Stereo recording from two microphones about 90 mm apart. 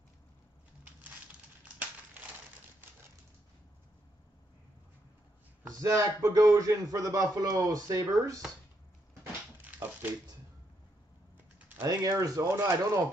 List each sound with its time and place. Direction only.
5.8 s speech: 35° right (ahead or behind)
11.8 s speech: 45° right (ahead or behind)